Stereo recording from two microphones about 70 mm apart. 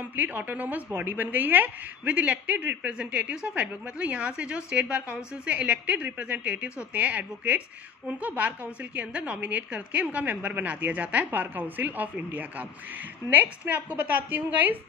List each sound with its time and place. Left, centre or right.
0.0 s a woman's voice: right